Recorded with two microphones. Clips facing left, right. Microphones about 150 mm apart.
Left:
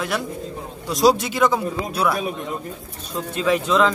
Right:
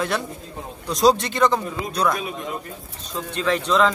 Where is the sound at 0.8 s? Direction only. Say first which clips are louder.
Left 1 dB; centre (ahead or behind).